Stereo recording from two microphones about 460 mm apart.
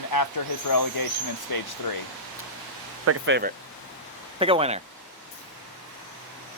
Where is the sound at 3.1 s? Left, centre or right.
Right.